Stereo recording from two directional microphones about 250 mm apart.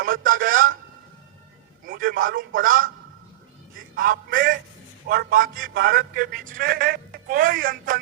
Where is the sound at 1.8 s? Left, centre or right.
Right.